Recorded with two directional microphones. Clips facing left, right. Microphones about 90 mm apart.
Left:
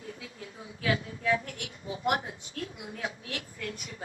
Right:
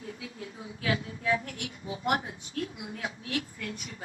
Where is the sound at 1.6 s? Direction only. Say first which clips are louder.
Left 1 dB; 30° right (ahead or behind).